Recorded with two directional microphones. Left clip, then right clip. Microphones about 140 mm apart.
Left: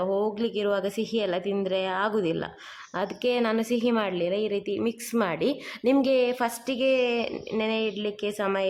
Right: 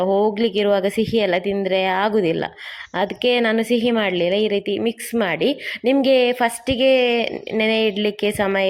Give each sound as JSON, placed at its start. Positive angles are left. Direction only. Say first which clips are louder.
{"t": 0.0, "sound": "a woman's voice", "louder": "right 9 dB", "side_deg": -20}